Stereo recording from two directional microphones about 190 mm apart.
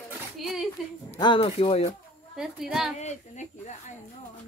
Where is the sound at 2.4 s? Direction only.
5° right (ahead or behind).